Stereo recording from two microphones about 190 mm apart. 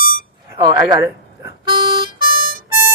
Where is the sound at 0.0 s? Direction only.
45° left (ahead or behind).